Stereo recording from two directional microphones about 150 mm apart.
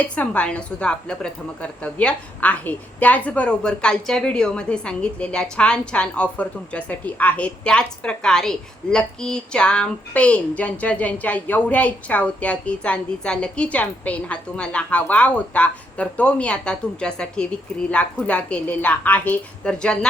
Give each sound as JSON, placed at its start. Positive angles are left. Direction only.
{"t": 0.0, "sound": "speech", "side_deg": 10}